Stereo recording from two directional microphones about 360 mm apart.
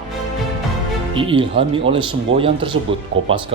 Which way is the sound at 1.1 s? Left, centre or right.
Centre.